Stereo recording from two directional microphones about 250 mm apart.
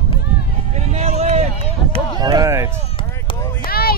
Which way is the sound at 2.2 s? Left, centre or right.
Centre.